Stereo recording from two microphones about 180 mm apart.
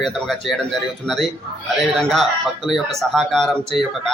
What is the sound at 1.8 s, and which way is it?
Speech, centre (ahead or behind).